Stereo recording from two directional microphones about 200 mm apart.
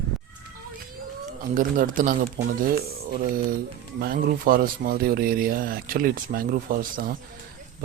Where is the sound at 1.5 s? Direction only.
45° right (ahead or behind).